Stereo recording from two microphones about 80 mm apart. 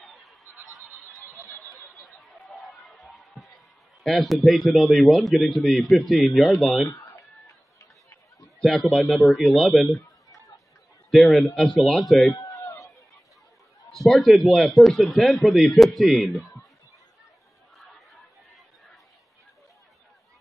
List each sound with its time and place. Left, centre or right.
2.0 s a sound: centre
4.0 s a man's voice: centre
6.6 s a man's voice: centre
6.9 s a sound: left
8.6 s a man's voice: centre
10.3 s chatter: left
11.1 s a man's voice: centre
12.4 s a sound: left
13.8 s a man's voice: centre